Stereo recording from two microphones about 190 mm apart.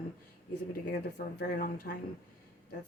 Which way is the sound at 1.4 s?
50° left (ahead or behind).